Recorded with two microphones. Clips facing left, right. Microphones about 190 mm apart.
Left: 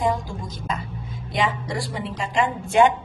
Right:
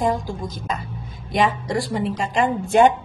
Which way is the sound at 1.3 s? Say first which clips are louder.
Right 4 dB; 45° right (ahead or behind).